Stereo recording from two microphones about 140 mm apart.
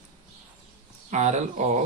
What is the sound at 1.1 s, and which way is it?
Speech, 55° right (ahead or behind).